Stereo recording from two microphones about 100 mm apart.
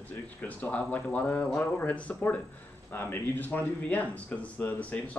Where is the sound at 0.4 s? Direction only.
15° left (ahead or behind).